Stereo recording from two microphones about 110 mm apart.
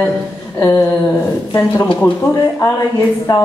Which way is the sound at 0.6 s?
20° left (ahead or behind).